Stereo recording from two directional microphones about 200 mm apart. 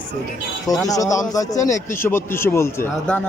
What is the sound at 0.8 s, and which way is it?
Speech, 15° left (ahead or behind).